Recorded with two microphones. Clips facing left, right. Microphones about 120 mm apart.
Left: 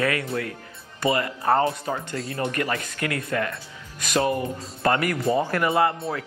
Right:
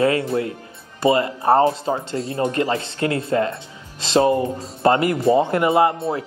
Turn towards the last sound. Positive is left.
turn(degrees=-25)  # may be behind; listen again after turning